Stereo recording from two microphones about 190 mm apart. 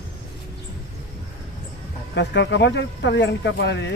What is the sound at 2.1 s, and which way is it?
Speech, 65° left (ahead or behind).